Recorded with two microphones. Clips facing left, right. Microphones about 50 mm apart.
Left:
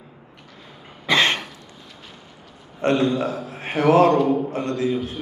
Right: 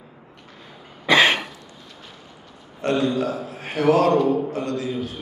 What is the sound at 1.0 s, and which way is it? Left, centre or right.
Cough, centre.